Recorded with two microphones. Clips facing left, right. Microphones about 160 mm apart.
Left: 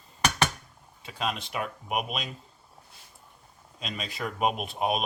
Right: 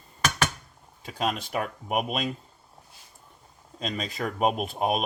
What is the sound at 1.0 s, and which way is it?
Speech, 45° right (ahead or behind).